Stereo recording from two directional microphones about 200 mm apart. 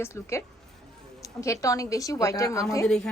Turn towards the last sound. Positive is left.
turn(degrees=5)  # may be behind; listen again after turning